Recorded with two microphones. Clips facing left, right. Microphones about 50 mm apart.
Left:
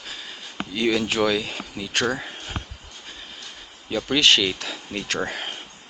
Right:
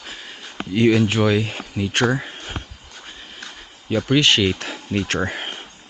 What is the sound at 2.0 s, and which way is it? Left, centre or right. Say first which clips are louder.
Speech: right 5 dB; centre.